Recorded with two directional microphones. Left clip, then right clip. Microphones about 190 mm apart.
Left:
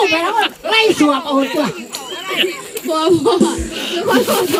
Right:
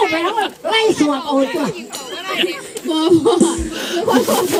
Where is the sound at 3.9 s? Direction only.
45° right (ahead or behind).